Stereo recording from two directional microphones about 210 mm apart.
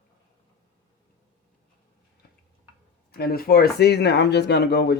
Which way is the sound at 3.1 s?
45° left (ahead or behind).